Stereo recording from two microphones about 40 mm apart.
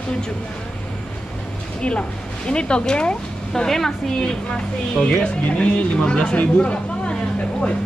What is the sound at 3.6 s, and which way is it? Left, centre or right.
Speech, centre.